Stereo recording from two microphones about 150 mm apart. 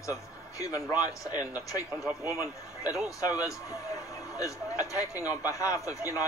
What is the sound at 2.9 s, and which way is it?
A man's voice, 20° left (ahead or behind).